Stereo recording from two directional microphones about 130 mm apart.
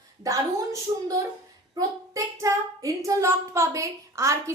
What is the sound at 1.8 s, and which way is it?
Child singing, 25° right (ahead or behind).